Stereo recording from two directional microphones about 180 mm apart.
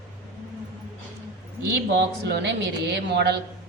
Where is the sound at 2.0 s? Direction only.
70° right (ahead or behind).